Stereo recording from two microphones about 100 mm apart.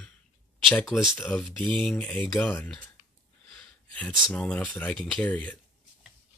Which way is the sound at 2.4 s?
15° left (ahead or behind).